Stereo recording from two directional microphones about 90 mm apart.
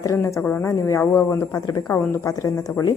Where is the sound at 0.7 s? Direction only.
30° left (ahead or behind).